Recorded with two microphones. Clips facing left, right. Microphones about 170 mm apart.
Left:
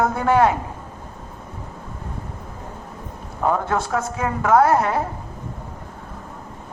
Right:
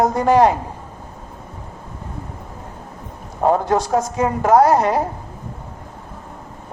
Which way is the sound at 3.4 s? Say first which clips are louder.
Right 4 dB; 30° right (ahead or behind).